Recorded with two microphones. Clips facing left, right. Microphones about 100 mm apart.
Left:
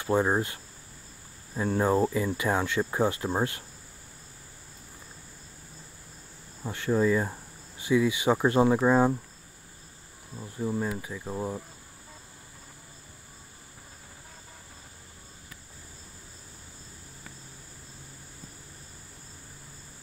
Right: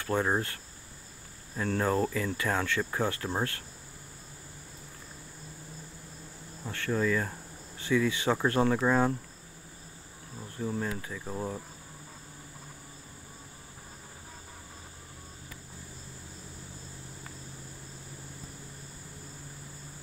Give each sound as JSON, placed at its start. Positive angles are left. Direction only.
{"t": 0.0, "sound": "speech", "side_deg": 15}
{"t": 1.6, "sound": "speech", "side_deg": 15}
{"t": 6.6, "sound": "speech", "side_deg": 20}
{"t": 10.6, "sound": "speech", "side_deg": 10}